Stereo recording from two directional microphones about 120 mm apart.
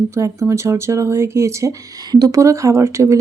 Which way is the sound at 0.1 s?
25° right (ahead or behind).